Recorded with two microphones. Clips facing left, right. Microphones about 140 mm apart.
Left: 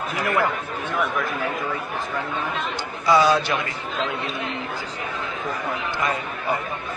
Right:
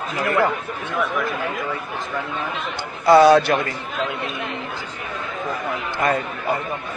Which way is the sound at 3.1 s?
60° right (ahead or behind).